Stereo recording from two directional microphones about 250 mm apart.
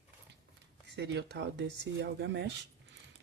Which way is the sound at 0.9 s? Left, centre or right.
Right.